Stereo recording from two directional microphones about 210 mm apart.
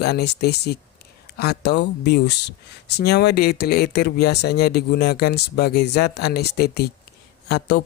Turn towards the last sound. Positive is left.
turn(degrees=50)  # may be behind; listen again after turning